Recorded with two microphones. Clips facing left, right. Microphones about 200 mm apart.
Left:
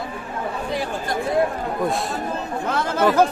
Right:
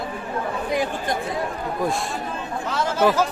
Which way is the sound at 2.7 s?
55° left (ahead or behind).